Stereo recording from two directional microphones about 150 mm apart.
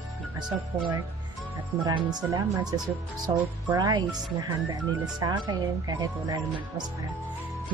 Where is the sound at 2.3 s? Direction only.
25° right (ahead or behind).